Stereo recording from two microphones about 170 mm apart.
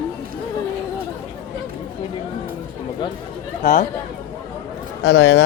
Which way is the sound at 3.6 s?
55° left (ahead or behind).